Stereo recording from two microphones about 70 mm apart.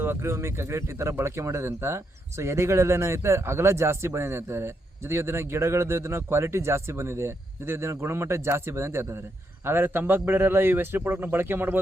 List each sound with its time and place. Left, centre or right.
0.0 s speech: right